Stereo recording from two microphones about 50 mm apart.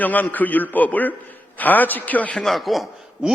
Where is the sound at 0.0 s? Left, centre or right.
Left.